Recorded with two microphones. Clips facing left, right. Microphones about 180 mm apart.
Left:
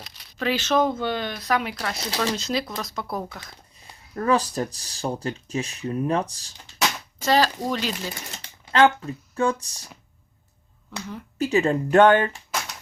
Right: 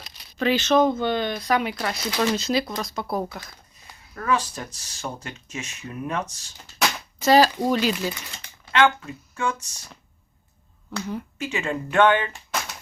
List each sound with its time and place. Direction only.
0.3 s speech: 5° left (ahead or behind)
2.0 s speech: 35° left (ahead or behind)
2.4 s speech: centre (ahead or behind)
4.1 s speech: 35° left (ahead or behind)
7.2 s speech: 10° right (ahead or behind)
8.1 s speech: 35° left (ahead or behind)
11.3 s speech: 35° left (ahead or behind)